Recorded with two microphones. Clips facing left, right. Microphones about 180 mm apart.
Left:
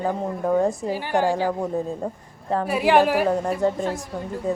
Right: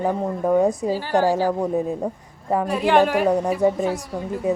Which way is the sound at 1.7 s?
15° right (ahead or behind).